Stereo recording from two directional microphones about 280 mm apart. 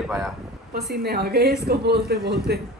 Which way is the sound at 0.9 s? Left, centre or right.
Right.